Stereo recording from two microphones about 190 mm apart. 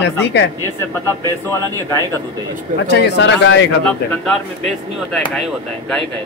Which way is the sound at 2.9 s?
65° left (ahead or behind).